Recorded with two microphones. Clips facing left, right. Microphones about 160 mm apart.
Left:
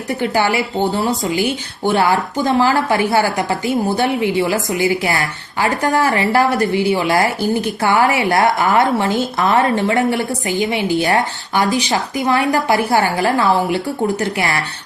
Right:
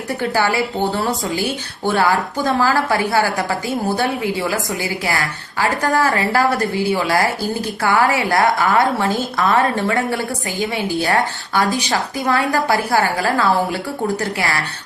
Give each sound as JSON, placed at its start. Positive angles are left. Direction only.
{"t": 0.2, "sound": "speech", "side_deg": 20}